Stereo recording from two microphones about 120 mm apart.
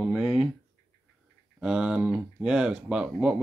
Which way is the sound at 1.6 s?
5° right (ahead or behind).